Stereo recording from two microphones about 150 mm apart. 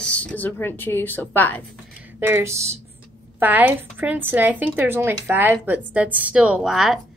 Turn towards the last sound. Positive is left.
turn(degrees=-5)  # may be behind; listen again after turning